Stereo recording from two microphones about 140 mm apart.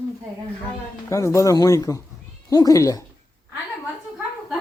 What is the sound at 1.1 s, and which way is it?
Speech, 20° left (ahead or behind).